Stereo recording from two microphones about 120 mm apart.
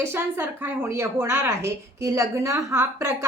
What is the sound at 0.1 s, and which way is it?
A woman's voice, 20° right (ahead or behind).